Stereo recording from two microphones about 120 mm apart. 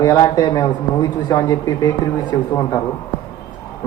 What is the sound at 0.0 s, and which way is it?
Speech, 30° left (ahead or behind).